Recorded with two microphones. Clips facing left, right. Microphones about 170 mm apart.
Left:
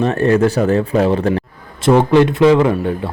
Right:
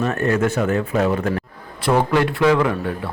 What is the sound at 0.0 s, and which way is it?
A man's voice, 30° left (ahead or behind).